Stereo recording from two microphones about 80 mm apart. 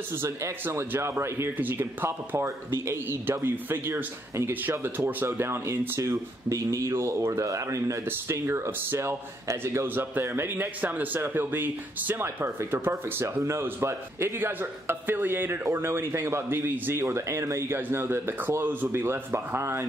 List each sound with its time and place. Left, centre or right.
0.1 s a man's voice: right